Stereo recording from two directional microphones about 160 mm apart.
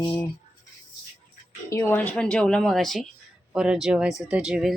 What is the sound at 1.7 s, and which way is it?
A woman's voice, 15° left (ahead or behind).